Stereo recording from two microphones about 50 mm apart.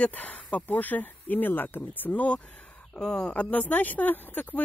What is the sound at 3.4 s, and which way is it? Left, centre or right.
Speech, left.